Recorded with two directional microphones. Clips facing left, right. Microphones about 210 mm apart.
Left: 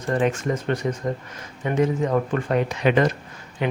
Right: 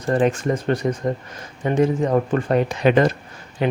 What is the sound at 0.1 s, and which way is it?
Speech, 35° right (ahead or behind).